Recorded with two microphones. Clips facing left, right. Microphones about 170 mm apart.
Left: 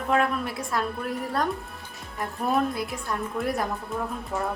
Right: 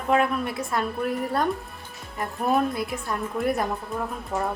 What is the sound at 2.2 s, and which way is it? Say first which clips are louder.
Speech: right 2 dB; centre (ahead or behind).